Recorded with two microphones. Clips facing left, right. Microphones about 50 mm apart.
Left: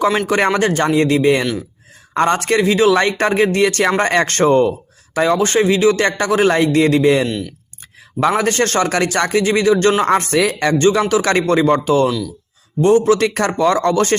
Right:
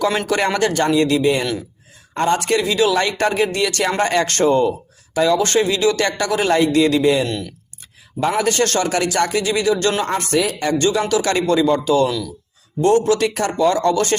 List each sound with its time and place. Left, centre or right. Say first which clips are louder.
0.3 s a man's voice: left 3 dB; left
5.4 s a man's voice: left 3 dB; left
7.3 s speech: left 2 dB; centre
8.4 s a man's voice: left 2 dB; left
8.9 s a man's voice: left 2 dB; left
11.1 s a man's voice: left 2 dB; left
12.0 s speech: left 3 dB; centre
12.8 s speech: left 3 dB; left
13.1 s a man's voice: left 2 dB; left